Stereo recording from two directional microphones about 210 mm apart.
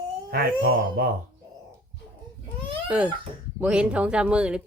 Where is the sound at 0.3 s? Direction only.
45° right (ahead or behind).